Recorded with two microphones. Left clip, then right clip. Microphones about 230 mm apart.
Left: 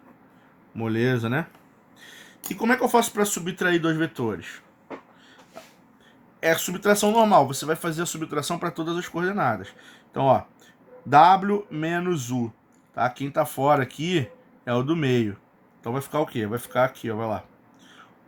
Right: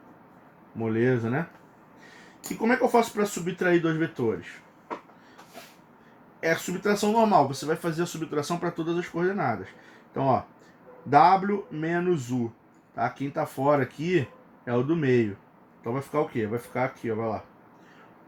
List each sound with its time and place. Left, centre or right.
0.8 s speech: left
2.6 s speech: left
6.4 s speech: left